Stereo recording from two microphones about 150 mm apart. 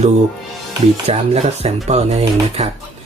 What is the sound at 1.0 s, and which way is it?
Speech, 45° right (ahead or behind).